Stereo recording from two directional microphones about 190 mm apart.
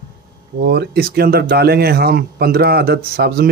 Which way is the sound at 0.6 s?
60° right (ahead or behind).